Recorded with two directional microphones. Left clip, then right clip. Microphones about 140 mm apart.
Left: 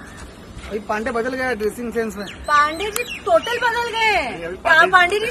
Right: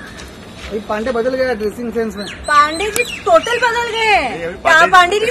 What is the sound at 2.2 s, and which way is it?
A woman's voice, 5° left (ahead or behind).